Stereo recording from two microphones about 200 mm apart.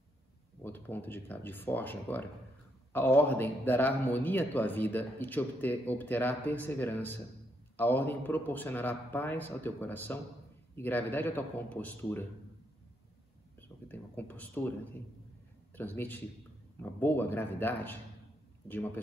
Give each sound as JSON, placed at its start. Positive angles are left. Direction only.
{"t": 0.6, "sound": "a man's voice", "side_deg": 10}
{"t": 13.6, "sound": "a man's voice", "side_deg": 10}